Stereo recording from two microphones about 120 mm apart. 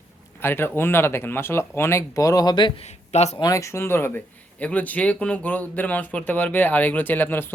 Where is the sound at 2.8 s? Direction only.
65° left (ahead or behind).